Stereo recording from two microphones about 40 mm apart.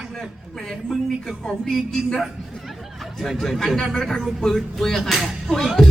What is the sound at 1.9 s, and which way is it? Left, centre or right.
Speech, centre.